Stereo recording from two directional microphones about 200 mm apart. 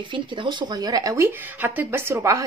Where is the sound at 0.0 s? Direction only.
25° right (ahead or behind).